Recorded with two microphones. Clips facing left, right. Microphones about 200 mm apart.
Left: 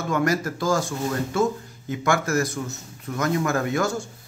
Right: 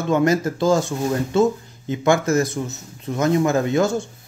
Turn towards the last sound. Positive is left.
turn(degrees=-20)  # may be behind; listen again after turning